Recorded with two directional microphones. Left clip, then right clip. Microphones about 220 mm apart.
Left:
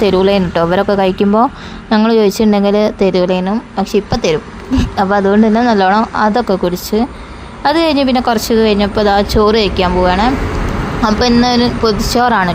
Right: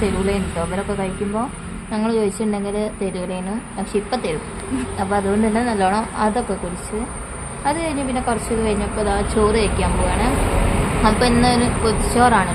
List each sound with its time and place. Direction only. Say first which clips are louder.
0.0 s a woman's voice: left 11 dB; 40° left (ahead or behind)
7.6 s a woman's voice: left 10 dB; 45° left (ahead or behind)